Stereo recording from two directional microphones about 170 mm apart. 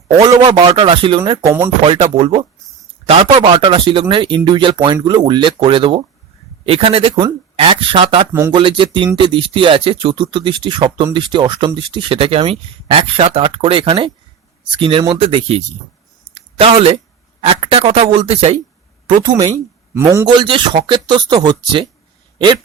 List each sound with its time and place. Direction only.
0.2 s speech: 25° right (ahead or behind)
8.3 s speech: 15° right (ahead or behind)
8.5 s speech: 30° right (ahead or behind)
16.3 s a sound: 35° right (ahead or behind)
17.4 s speech: 35° right (ahead or behind)
19.5 s speech: 15° right (ahead or behind)
20.2 s speech: 30° right (ahead or behind)